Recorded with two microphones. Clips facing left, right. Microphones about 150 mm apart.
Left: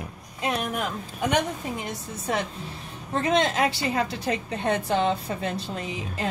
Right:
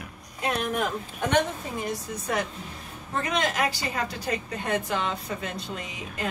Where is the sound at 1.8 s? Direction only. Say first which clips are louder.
Even; 25° left (ahead or behind).